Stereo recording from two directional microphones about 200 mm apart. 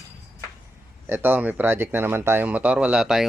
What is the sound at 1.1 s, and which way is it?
Speech, 10° right (ahead or behind).